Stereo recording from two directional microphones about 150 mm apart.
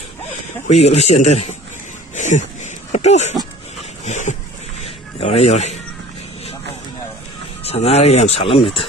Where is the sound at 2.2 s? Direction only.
55° left (ahead or behind).